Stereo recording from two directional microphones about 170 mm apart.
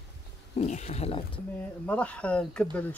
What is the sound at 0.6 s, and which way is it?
Speech, 40° left (ahead or behind).